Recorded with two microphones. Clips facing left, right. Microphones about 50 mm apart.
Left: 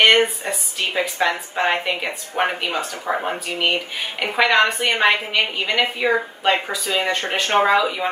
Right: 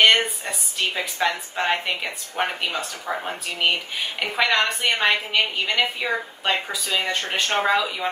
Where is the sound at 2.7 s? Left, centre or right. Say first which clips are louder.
Left 4 dB; left.